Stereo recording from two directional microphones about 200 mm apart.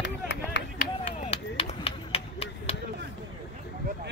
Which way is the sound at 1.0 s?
35° left (ahead or behind).